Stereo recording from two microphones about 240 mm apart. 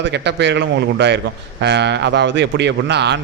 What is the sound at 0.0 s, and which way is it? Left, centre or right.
Speech, right.